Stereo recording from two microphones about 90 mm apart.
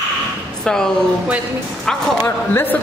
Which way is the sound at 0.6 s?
5° left (ahead or behind).